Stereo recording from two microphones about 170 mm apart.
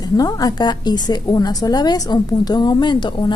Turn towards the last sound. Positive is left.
turn(degrees=25)  # may be behind; listen again after turning